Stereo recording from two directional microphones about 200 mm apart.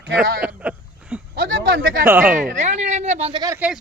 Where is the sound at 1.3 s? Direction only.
50° right (ahead or behind).